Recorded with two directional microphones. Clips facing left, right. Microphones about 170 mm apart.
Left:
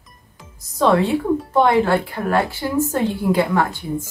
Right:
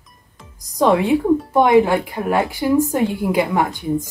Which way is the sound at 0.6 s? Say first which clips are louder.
Right 1 dB; 15° right (ahead or behind).